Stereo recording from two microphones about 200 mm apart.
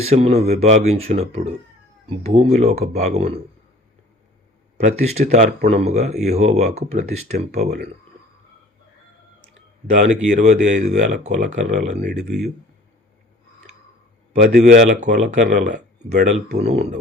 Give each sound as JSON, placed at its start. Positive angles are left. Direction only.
{"t": 0.0, "sound": "speech", "side_deg": -30}
{"t": 4.8, "sound": "speech", "side_deg": -35}
{"t": 9.9, "sound": "speech", "side_deg": -35}
{"t": 12.1, "sound": "speech", "side_deg": -5}
{"t": 14.3, "sound": "speech", "side_deg": -40}